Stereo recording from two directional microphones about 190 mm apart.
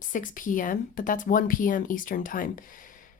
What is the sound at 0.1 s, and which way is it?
Speech, 45° left (ahead or behind).